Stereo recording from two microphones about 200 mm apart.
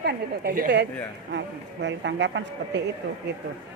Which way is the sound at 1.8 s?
60° right (ahead or behind).